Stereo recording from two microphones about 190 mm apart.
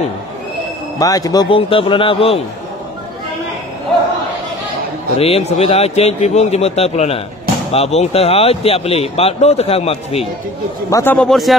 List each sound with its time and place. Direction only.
0.9 s speech: 20° left (ahead or behind)
5.1 s a man's voice: 35° left (ahead or behind)
10.9 s a man's voice: 15° left (ahead or behind)